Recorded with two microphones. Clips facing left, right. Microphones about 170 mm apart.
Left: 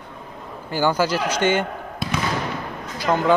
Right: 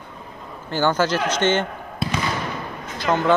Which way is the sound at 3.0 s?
10° left (ahead or behind).